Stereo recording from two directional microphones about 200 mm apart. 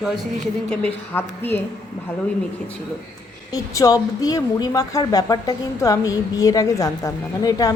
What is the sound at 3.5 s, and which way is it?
Speech, 20° left (ahead or behind).